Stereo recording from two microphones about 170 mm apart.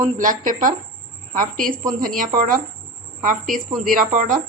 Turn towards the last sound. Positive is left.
turn(degrees=-50)  # may be behind; listen again after turning